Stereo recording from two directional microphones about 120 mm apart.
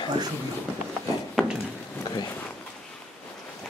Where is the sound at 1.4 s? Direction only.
5° left (ahead or behind).